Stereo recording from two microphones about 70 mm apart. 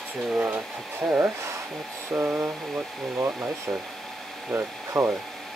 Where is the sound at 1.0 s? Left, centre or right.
Centre.